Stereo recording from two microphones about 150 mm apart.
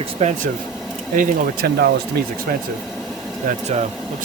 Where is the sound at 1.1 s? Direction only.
75° right (ahead or behind).